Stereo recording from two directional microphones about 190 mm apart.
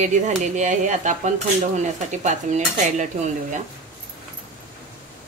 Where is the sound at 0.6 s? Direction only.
40° right (ahead or behind).